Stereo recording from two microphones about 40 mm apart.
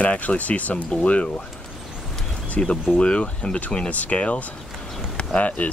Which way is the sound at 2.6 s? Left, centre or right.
Left.